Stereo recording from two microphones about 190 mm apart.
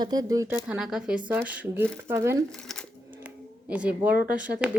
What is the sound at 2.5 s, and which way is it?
Speech, centre (ahead or behind).